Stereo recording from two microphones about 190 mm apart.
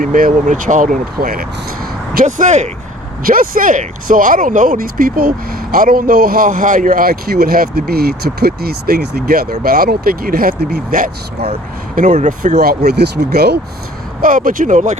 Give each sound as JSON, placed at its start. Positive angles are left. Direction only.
{"t": 0.0, "sound": "speech", "side_deg": -45}
{"t": 2.2, "sound": "speech", "side_deg": -40}
{"t": 12.5, "sound": "speech", "side_deg": -55}
{"t": 14.2, "sound": "speech", "side_deg": -45}